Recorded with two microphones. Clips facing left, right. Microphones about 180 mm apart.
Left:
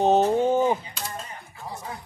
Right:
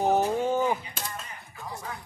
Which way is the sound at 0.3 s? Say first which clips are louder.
Left 5 dB; 20° left (ahead or behind).